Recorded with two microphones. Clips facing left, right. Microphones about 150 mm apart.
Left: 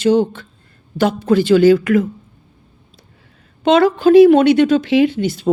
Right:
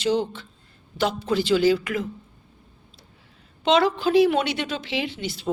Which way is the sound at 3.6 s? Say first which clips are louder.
Left 8 dB; 50° left (ahead or behind).